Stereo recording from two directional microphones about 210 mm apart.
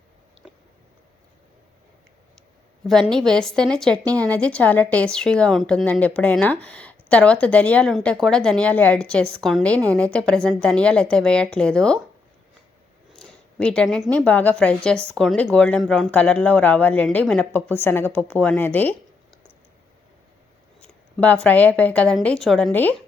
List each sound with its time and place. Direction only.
2.8 s a woman's voice: centre (ahead or behind)
13.1 s a sound: 5° left (ahead or behind)
14.1 s a woman's voice: 5° left (ahead or behind)
20.8 s speech: 5° left (ahead or behind)